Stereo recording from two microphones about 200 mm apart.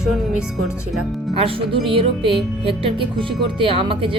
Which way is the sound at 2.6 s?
25° right (ahead or behind).